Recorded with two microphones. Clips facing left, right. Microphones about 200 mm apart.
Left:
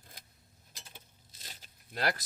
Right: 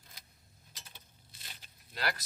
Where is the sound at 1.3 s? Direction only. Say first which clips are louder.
Left 2 dB; 40° left (ahead or behind).